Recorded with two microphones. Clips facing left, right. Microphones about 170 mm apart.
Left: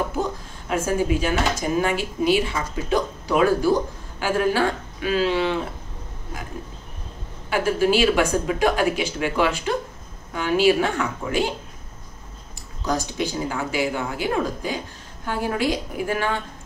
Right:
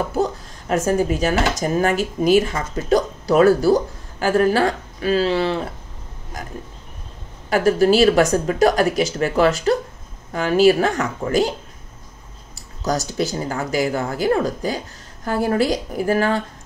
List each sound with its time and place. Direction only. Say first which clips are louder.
0.2 s speech: right 5 dB; 40° right (ahead or behind)
7.4 s speech: right 5 dB; 40° right (ahead or behind)
13.0 s speech: right 3 dB; 40° right (ahead or behind)